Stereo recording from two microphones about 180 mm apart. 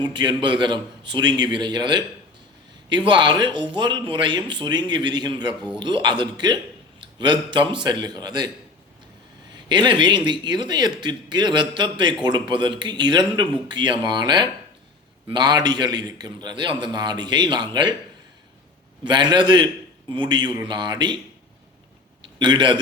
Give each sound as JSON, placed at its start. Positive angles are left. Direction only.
{"t": 0.0, "sound": "a man's voice", "side_deg": -25}
{"t": 3.1, "sound": "a man's voice", "side_deg": -25}
{"t": 9.6, "sound": "a man's voice", "side_deg": -25}
{"t": 19.0, "sound": "a man's voice", "side_deg": -25}
{"t": 22.4, "sound": "a man's voice", "side_deg": -25}